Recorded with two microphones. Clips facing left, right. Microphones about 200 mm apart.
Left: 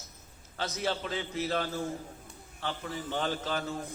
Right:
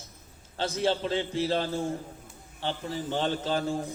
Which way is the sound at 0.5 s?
30° right (ahead or behind).